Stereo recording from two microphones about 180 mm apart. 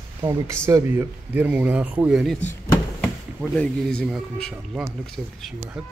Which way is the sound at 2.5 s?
5° left (ahead or behind).